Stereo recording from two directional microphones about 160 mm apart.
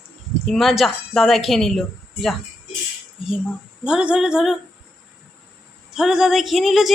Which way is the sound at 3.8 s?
5° right (ahead or behind).